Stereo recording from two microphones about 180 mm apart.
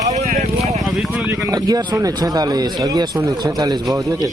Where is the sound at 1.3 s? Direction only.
20° right (ahead or behind).